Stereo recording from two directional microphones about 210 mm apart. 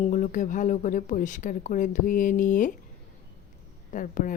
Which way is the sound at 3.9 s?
40° left (ahead or behind).